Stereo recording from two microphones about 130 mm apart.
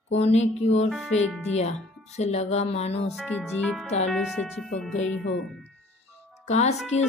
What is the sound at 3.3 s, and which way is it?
Speech, 10° left (ahead or behind).